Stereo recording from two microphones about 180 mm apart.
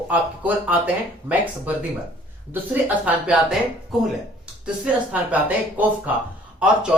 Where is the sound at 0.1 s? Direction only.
10° right (ahead or behind).